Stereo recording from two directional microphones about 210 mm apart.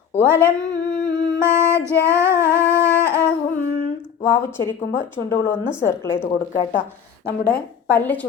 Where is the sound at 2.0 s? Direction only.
10° right (ahead or behind).